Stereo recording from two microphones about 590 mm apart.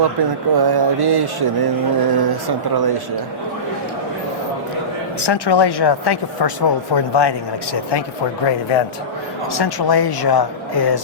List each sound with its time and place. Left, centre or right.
0.5 s a sound: right
5.2 s speech: left
9.5 s speech: left